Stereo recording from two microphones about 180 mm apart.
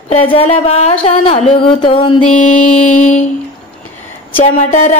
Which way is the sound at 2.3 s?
45° left (ahead or behind).